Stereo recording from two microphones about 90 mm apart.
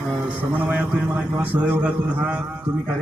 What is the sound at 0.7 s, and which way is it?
Mantra, 15° right (ahead or behind).